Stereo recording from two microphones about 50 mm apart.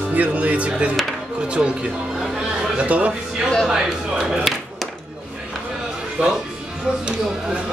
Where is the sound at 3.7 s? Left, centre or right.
Centre.